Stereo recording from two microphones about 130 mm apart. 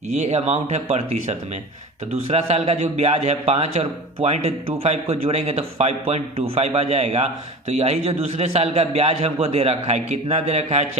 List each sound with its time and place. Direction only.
0.1 s a man's voice: 60° right (ahead or behind)